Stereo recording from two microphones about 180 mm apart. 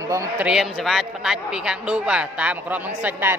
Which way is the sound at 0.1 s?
5° right (ahead or behind).